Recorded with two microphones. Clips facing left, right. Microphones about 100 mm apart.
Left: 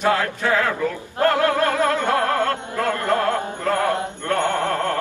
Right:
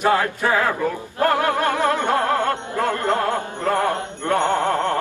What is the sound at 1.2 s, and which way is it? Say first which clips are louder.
Music: left 1 dB; 20° right (ahead or behind).